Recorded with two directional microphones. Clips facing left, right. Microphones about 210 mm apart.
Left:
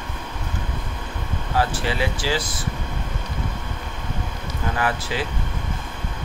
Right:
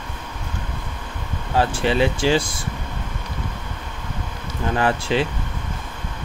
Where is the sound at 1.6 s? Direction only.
25° right (ahead or behind).